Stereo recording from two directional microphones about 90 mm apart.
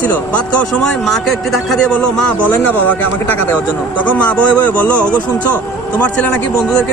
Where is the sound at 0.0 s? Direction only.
15° left (ahead or behind).